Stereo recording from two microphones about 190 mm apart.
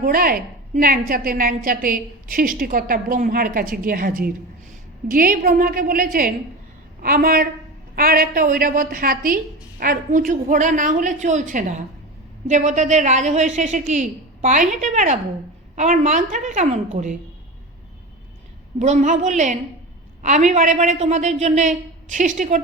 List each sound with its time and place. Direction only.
0.0 s a woman's voice: 50° right (ahead or behind)
18.8 s a woman's voice: 40° right (ahead or behind)